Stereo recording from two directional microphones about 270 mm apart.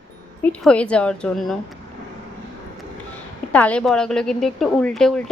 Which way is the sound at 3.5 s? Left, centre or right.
Centre.